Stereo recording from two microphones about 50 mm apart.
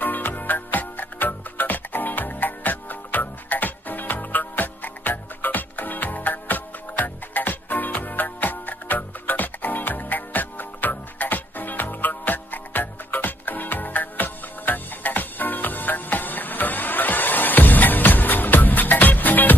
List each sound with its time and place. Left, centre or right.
0.0 s music: left